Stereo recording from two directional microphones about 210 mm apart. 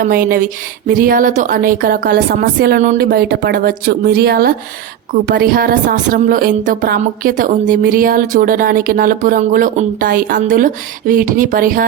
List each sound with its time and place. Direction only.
0.0 s speech: 45° right (ahead or behind)